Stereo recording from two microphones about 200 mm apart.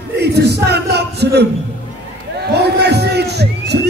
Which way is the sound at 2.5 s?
55° right (ahead or behind).